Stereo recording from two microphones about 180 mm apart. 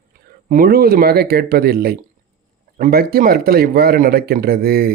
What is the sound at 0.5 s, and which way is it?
A man's voice, 55° right (ahead or behind).